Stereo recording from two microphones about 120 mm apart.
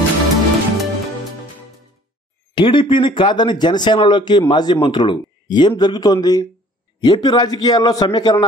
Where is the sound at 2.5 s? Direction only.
45° left (ahead or behind).